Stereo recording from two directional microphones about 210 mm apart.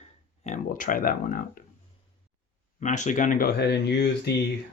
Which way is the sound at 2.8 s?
35° left (ahead or behind).